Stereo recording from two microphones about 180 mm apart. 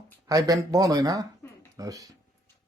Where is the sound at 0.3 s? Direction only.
20° right (ahead or behind).